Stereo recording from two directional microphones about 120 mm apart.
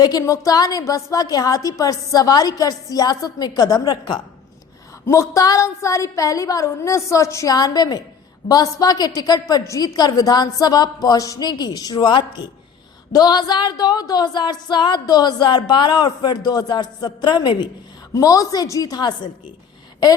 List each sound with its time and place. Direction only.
0.0 s speech: 30° left (ahead or behind)
5.0 s a woman's voice: 25° left (ahead or behind)
18.1 s a woman's voice: 30° left (ahead or behind)